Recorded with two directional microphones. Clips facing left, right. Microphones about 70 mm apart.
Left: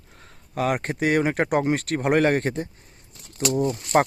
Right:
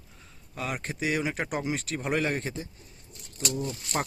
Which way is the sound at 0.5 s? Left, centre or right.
Left.